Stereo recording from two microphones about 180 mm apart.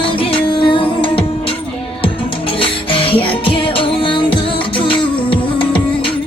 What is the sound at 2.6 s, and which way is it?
Music, 30° left (ahead or behind).